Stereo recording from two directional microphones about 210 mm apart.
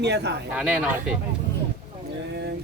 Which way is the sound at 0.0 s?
55° right (ahead or behind).